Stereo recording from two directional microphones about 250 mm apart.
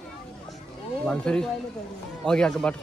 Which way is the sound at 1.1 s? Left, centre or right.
Centre.